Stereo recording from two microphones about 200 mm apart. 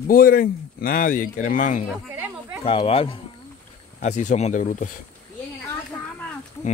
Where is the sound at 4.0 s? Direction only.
35° left (ahead or behind).